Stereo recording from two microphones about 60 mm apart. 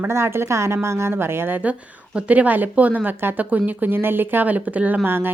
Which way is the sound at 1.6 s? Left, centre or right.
Right.